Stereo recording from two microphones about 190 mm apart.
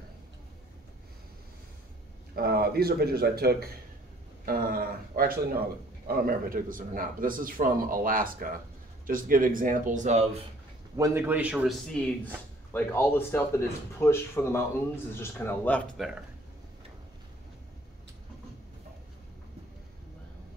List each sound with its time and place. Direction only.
2.3 s speech: 55° right (ahead or behind); by 10.2 s 40° right (ahead or behind)
11.0 s a man's voice: 10° right (ahead or behind)
11.9 s speech: 5° left (ahead or behind)